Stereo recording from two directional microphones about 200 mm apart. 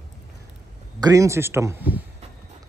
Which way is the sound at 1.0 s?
15° right (ahead or behind).